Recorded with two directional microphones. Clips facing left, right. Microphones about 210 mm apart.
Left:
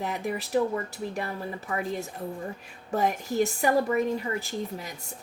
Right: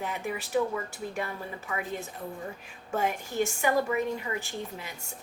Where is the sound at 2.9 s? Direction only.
40° left (ahead or behind).